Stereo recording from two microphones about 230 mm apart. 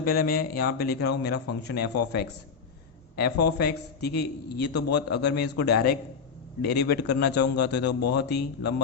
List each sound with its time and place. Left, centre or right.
0.0 s a man's voice: left